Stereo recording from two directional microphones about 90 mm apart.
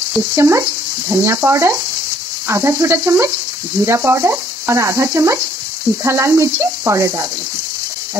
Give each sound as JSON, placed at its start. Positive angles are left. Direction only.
{"t": 0.4, "sound": "stir", "side_deg": -30}
{"t": 2.4, "sound": "sizzle", "side_deg": -30}
{"t": 3.8, "sound": "stir", "side_deg": -30}